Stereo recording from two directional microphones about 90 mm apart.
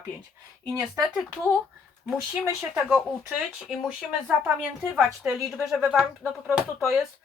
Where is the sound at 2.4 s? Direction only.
15° right (ahead or behind).